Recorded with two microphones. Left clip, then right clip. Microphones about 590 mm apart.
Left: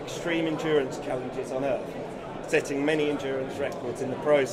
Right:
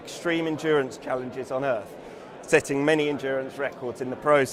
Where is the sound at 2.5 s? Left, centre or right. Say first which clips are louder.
Right 4 dB; right.